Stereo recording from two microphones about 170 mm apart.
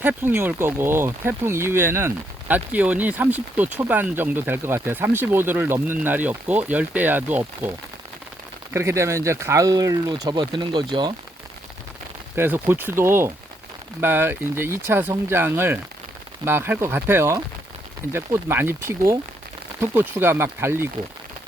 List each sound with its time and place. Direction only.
0.0 s speech: 10° right (ahead or behind)
8.7 s speech: 15° right (ahead or behind)
12.4 s speech: 15° right (ahead or behind)